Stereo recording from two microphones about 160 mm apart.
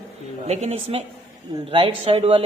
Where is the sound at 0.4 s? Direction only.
40° right (ahead or behind).